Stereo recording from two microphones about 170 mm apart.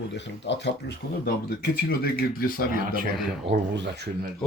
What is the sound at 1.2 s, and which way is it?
Speech, 60° left (ahead or behind).